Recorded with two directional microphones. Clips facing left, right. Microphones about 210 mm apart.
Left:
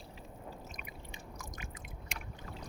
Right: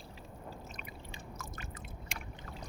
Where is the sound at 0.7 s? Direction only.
15° left (ahead or behind).